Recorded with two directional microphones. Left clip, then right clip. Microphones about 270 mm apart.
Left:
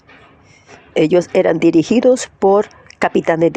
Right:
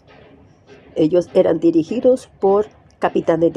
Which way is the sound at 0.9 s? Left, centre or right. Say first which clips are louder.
Left 2 dB; left.